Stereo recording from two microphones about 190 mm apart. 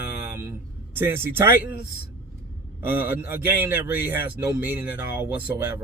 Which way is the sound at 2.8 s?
10° right (ahead or behind).